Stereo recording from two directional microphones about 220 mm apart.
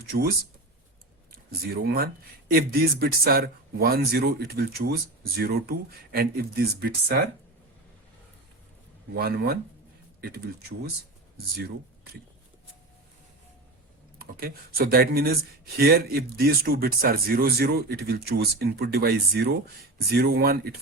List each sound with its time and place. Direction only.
0.1 s speech: 40° right (ahead or behind)
1.6 s speech: 45° right (ahead or behind)
9.1 s speech: 45° right (ahead or behind)
14.2 s speech: 45° right (ahead or behind)